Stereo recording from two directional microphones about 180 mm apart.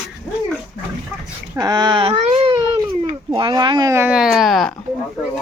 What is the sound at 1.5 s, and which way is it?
Speech, 20° right (ahead or behind).